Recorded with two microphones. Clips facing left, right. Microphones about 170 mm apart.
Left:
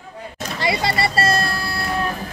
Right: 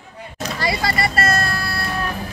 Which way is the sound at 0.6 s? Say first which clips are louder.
Left 1 dB; 25° left (ahead or behind).